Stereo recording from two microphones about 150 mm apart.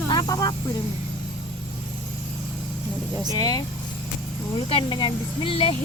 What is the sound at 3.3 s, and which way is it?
Speech, 25° left (ahead or behind).